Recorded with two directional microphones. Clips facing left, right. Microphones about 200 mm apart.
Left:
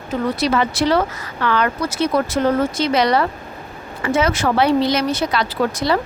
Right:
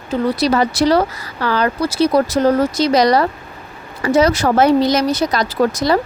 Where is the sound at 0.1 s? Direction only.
35° right (ahead or behind).